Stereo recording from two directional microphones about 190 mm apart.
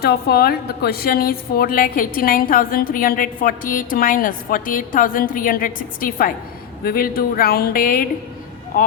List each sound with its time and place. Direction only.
0.0 s a woman's voice: 55° left (ahead or behind)